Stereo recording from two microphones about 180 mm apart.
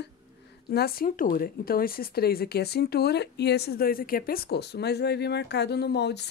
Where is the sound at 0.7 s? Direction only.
55° left (ahead or behind).